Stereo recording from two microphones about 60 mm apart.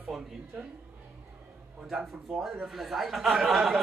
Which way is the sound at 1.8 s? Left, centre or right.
Centre.